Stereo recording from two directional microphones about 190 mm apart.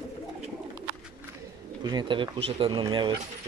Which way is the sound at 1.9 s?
25° right (ahead or behind).